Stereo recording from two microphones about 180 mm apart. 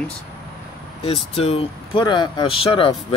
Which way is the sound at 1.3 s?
35° left (ahead or behind).